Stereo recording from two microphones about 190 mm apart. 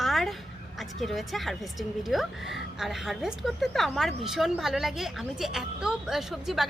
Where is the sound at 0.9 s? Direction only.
Centre (ahead or behind).